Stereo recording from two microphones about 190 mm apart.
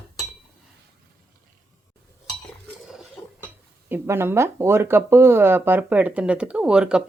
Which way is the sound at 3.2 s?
15° left (ahead or behind).